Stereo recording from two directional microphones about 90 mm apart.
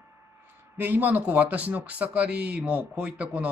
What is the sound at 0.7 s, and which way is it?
Speech, 20° right (ahead or behind).